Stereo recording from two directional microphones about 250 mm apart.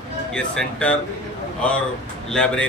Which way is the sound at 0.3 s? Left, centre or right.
Centre.